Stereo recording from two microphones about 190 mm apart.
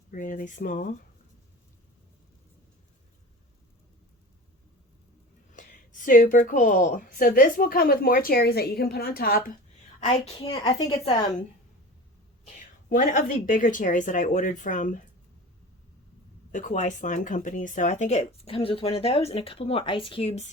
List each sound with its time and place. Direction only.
0.1 s speech: 45° left (ahead or behind)
5.5 s speech: 45° left (ahead or behind)
10.2 s a woman's voice: 30° left (ahead or behind)
12.5 s speech: 45° left (ahead or behind)
16.5 s speech: 40° left (ahead or behind)